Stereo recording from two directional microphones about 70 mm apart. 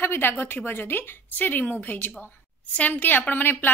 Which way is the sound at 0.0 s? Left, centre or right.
Left.